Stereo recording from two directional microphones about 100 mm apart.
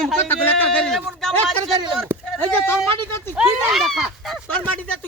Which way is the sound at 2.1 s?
20° right (ahead or behind).